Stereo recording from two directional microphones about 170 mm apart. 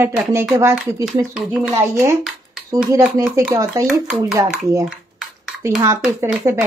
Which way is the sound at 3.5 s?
20° right (ahead or behind).